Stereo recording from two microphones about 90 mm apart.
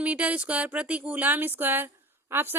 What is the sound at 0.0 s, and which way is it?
Speech, 15° right (ahead or behind).